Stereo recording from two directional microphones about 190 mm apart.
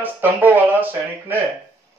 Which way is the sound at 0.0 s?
10° right (ahead or behind).